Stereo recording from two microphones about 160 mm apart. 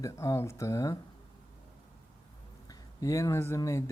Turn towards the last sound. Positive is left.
turn(degrees=20)  # may be behind; listen again after turning